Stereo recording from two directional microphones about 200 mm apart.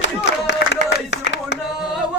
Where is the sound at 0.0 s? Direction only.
65° left (ahead or behind).